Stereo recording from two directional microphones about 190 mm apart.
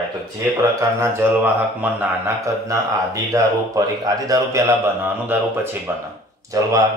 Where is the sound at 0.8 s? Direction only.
15° right (ahead or behind).